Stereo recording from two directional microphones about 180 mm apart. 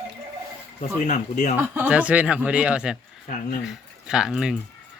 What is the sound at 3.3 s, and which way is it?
Speech, 50° left (ahead or behind).